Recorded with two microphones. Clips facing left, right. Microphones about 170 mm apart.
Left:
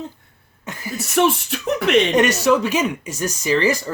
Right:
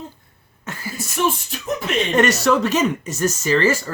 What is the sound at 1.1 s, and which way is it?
Beatboxing, 70° left (ahead or behind).